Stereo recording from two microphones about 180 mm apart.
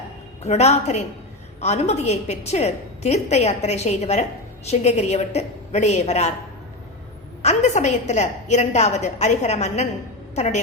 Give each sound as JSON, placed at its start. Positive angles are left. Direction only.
{"t": 0.4, "sound": "a woman's voice", "side_deg": 40}
{"t": 7.4, "sound": "a woman's voice", "side_deg": 40}